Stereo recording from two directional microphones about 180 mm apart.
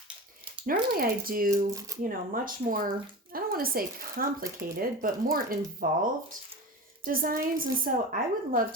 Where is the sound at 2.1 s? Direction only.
50° right (ahead or behind).